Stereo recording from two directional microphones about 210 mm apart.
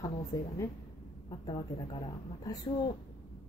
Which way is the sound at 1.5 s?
20° left (ahead or behind).